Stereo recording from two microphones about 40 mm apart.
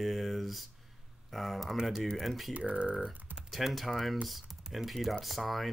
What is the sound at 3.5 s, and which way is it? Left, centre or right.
Speech, centre.